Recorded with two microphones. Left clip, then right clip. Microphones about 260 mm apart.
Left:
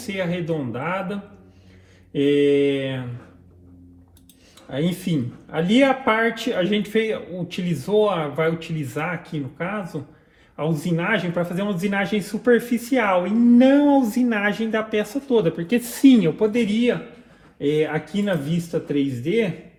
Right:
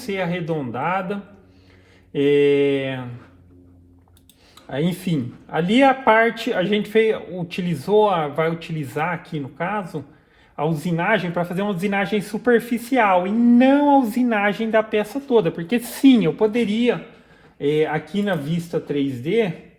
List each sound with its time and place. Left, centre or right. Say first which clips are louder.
0.1 s speech: right 1 dB; right
4.7 s speech: right 1 dB; right